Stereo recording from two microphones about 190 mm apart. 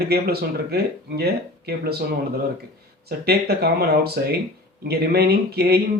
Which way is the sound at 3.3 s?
55° right (ahead or behind).